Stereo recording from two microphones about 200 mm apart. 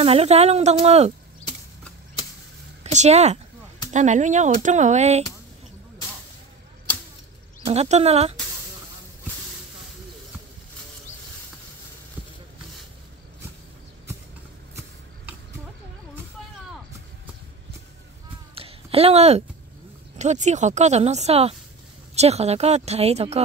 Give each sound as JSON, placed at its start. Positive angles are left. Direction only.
{"t": 0.0, "sound": "speech", "side_deg": -30}
{"t": 2.8, "sound": "speech", "side_deg": -35}
{"t": 7.6, "sound": "speech", "side_deg": -30}
{"t": 18.5, "sound": "a sound", "side_deg": -30}
{"t": 20.2, "sound": "speech", "side_deg": -35}